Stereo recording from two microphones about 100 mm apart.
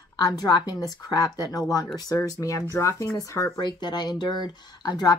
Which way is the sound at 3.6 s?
50° left (ahead or behind).